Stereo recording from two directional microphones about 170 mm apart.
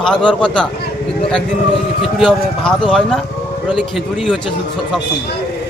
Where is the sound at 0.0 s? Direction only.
5° left (ahead or behind).